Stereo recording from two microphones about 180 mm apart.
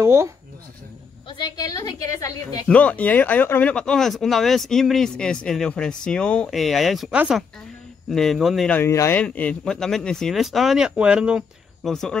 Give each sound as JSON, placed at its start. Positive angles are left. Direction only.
{"t": 0.0, "sound": "speech", "side_deg": -15}
{"t": 1.3, "sound": "a woman's voice", "side_deg": 20}
{"t": 2.7, "sound": "speech", "side_deg": 5}